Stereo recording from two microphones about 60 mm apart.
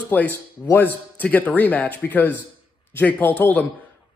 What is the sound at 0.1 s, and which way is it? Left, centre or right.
A man's voice, left.